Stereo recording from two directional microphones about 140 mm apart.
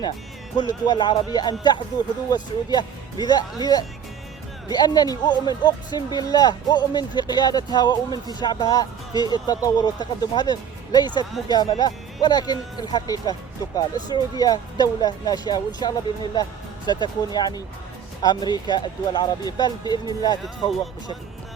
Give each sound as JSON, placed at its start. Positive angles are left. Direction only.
{"t": 0.9, "sound": "speech", "side_deg": 35}